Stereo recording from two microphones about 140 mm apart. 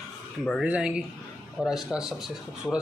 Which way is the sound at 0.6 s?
5° right (ahead or behind).